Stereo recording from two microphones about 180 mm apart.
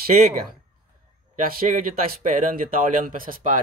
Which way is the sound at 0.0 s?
55° right (ahead or behind).